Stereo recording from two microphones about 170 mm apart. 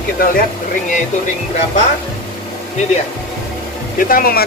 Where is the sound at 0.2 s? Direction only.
55° left (ahead or behind).